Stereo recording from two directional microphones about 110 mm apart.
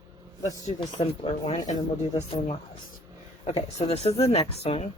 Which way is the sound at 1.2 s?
65° left (ahead or behind).